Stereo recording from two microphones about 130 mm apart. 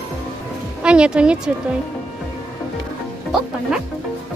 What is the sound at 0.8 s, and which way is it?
Speech, 10° right (ahead or behind).